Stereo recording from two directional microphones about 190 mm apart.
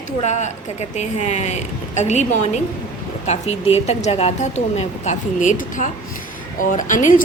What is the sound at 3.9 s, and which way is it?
A woman's voice, 35° left (ahead or behind).